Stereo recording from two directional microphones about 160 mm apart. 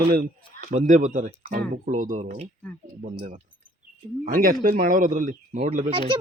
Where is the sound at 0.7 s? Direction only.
50° right (ahead or behind).